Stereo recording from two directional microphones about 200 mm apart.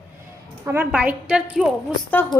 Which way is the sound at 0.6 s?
10° right (ahead or behind).